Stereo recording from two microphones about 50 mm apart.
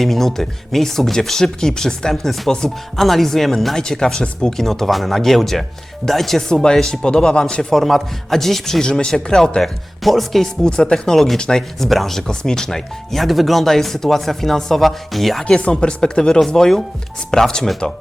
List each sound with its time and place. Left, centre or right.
0.0 s a man's voice: centre
3.0 s speech: centre
6.5 s a man's voice: centre
8.8 s a man's voice: centre
10.7 s a man's voice: centre
15.6 s a man's voice: centre